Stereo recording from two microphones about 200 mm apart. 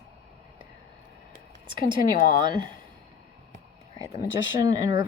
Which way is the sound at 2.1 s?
40° left (ahead or behind).